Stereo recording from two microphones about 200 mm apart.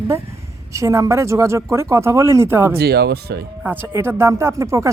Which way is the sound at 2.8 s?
55° right (ahead or behind).